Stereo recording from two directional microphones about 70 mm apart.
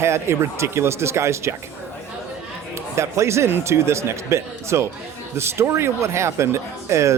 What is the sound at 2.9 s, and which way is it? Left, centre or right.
Speech, right.